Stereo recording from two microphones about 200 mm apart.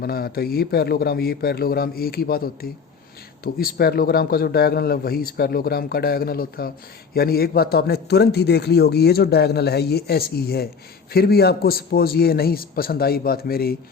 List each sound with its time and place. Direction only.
0.0 s speech: 50° left (ahead or behind)